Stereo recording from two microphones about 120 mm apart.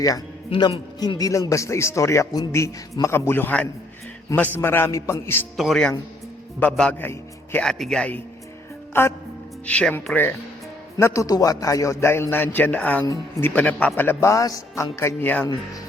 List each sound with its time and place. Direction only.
0.5 s a man's voice: 45° left (ahead or behind)
0.9 s a man's voice: 35° left (ahead or behind)
5.5 s a man's voice: centre (ahead or behind)
8.9 s music: 20° left (ahead or behind)
9.6 s a man's voice: 10° left (ahead or behind)
10.9 s a man's voice: 25° left (ahead or behind)